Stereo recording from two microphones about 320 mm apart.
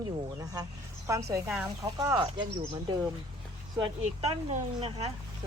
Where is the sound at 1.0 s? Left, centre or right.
Centre.